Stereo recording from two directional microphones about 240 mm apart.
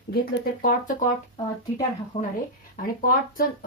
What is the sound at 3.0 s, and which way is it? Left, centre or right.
Speech, left.